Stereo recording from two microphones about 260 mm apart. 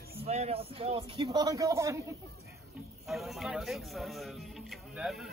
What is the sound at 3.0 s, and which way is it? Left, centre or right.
Speech, centre.